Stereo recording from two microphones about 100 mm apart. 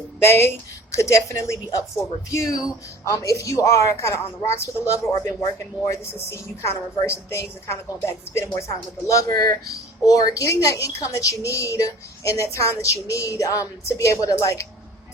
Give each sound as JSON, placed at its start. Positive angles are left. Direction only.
{"t": 0.2, "sound": "a woman's voice", "side_deg": 25}
{"t": 7.0, "sound": "a woman's voice", "side_deg": 25}